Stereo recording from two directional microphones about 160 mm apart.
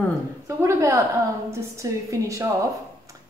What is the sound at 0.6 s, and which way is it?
A woman's voice, 20° right (ahead or behind).